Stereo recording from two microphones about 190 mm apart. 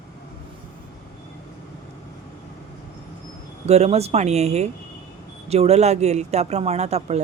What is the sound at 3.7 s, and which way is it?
Speech, 35° right (ahead or behind).